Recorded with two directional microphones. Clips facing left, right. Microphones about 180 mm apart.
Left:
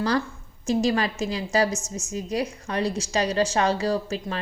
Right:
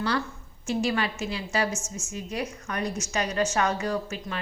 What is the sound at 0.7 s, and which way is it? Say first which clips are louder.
A woman's voice: left 4 dB; 40° left (ahead or behind).